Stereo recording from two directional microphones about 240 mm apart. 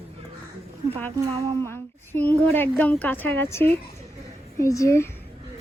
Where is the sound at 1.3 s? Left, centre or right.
Right.